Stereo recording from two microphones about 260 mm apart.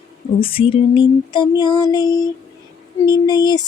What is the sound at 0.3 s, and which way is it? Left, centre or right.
Child singing, left.